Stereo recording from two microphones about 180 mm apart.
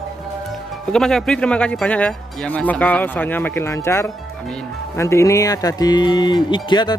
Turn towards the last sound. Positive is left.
turn(degrees=25)  # may be behind; listen again after turning